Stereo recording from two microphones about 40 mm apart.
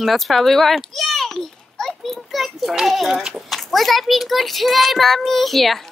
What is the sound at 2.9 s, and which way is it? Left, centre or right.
A child's voice, centre.